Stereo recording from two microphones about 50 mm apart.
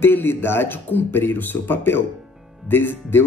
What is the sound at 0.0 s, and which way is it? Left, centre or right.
Speech, left.